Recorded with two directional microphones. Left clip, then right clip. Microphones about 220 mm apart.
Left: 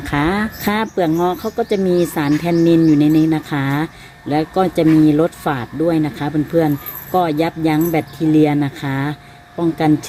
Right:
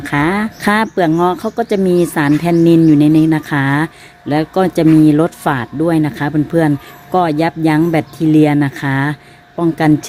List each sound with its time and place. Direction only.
0.0 s speech: 20° right (ahead or behind)